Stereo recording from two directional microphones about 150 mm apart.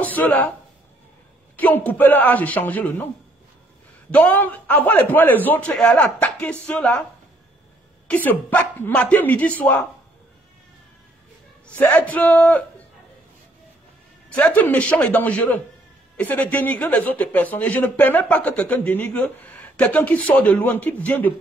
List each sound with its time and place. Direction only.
0.0 s speech: 10° left (ahead or behind)
1.6 s speech: 10° left (ahead or behind)
4.1 s speech: 10° left (ahead or behind)
8.1 s speech: 10° left (ahead or behind)
11.6 s speech: 10° left (ahead or behind)
14.3 s speech: 10° left (ahead or behind)